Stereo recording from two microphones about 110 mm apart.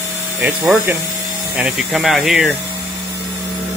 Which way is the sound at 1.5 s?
5° right (ahead or behind).